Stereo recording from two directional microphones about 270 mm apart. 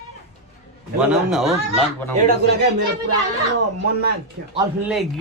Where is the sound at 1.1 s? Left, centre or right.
Centre.